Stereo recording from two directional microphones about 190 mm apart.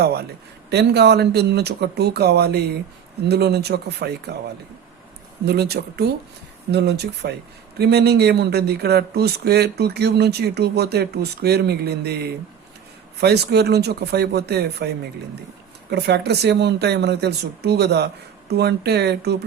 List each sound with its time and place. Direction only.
0.0 s speech: 60° right (ahead or behind)
5.5 s speech: 55° right (ahead or behind)
15.9 s speech: 60° right (ahead or behind)